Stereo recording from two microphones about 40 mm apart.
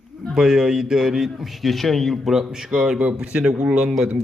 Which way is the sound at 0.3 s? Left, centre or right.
Centre.